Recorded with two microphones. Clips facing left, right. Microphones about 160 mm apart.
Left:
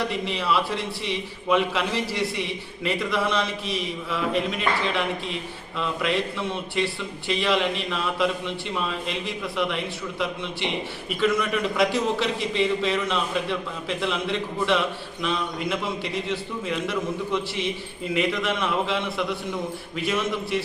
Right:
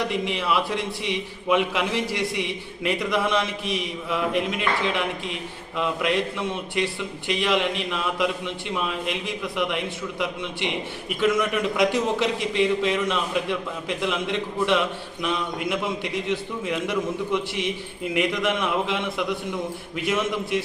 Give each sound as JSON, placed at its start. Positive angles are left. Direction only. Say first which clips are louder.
{"t": 0.3, "sound": "a man's voice", "louder": "even", "side_deg": -15}
{"t": 11.2, "sound": "a man's voice", "louder": "right 1 dB", "side_deg": -15}